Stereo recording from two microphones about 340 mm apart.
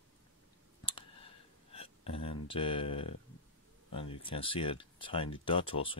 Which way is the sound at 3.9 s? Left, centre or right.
Centre.